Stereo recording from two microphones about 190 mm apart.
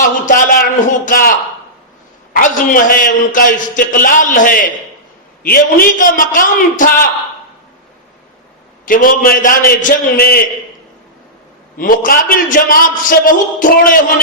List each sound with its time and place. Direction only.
0.0 s a sound: 45° left (ahead or behind)
2.3 s a man's voice: 45° left (ahead or behind)
8.9 s a man's voice: 45° left (ahead or behind)
11.8 s a man's voice: 50° left (ahead or behind)